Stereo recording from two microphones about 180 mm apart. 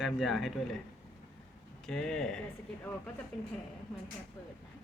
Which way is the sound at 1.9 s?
5° left (ahead or behind).